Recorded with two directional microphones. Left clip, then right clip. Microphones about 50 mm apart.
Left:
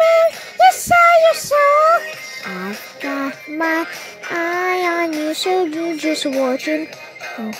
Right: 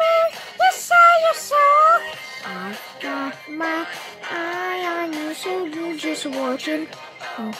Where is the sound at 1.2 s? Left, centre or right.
Left.